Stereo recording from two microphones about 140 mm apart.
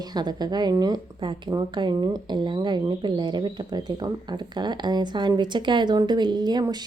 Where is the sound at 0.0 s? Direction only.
30° right (ahead or behind).